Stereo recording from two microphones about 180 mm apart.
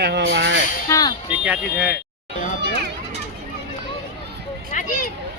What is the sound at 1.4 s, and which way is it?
Speech, 5° right (ahead or behind).